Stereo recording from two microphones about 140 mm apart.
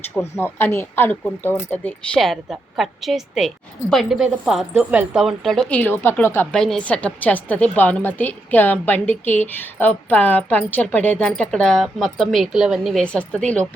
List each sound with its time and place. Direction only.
0.3 s a woman's voice: 15° left (ahead or behind)
2.1 s a woman's voice: centre (ahead or behind)
6.5 s a woman's voice: 5° left (ahead or behind)